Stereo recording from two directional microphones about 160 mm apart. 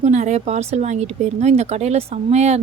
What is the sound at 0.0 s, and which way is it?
Speech, 45° right (ahead or behind).